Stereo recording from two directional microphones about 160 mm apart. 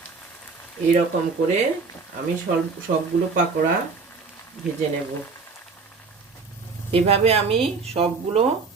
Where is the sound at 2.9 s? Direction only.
70° right (ahead or behind).